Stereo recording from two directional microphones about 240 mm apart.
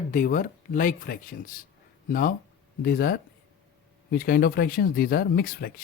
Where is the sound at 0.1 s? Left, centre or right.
Left.